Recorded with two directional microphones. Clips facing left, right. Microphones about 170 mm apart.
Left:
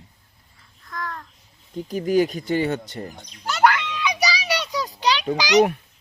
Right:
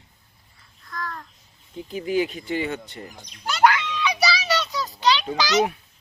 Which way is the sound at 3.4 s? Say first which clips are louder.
Even; 15° right (ahead or behind).